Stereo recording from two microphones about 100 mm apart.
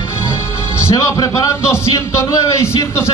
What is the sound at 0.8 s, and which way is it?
A man's voice, 30° left (ahead or behind).